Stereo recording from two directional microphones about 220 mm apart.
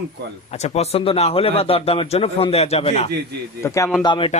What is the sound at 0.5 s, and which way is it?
A man's voice, 30° left (ahead or behind).